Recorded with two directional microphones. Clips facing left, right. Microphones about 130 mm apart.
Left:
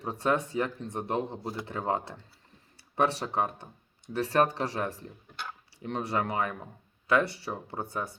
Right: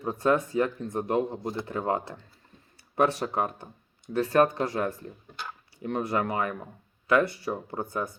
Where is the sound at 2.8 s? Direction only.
30° left (ahead or behind).